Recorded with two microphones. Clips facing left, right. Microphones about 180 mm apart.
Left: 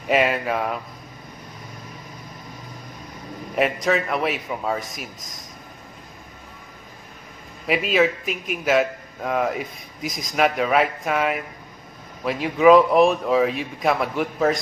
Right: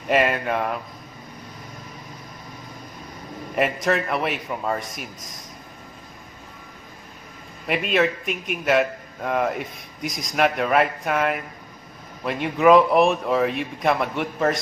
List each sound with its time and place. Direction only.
0.1 s a man's voice: centre (ahead or behind)
3.5 s a man's voice: centre (ahead or behind)
7.6 s a man's voice: centre (ahead or behind)